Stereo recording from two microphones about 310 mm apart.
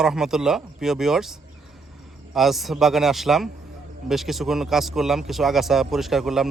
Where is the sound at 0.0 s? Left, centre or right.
Centre.